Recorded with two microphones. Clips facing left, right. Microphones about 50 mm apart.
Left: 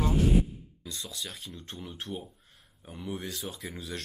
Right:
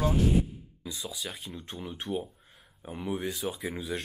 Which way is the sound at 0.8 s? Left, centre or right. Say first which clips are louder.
Right 2 dB; centre.